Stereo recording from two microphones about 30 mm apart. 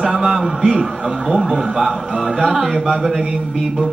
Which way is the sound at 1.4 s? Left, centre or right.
Centre.